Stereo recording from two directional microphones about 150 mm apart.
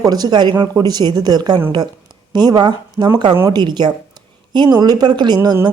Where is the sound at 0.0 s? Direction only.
25° right (ahead or behind).